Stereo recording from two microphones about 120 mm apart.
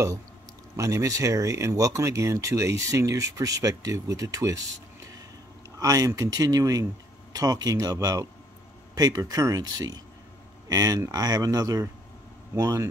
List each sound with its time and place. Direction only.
0.7 s speech: 25° right (ahead or behind)
5.8 s speech: 30° right (ahead or behind)